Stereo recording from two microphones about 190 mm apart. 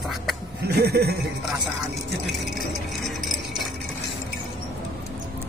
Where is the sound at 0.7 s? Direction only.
60° right (ahead or behind).